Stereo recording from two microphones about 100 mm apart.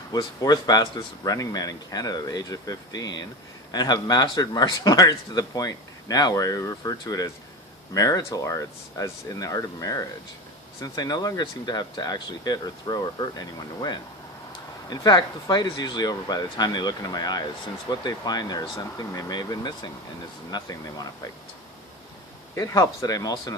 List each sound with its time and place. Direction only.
0.1 s a man's voice: 40° left (ahead or behind)
14.8 s a man's voice: 45° left (ahead or behind)
22.5 s a man's voice: 35° left (ahead or behind)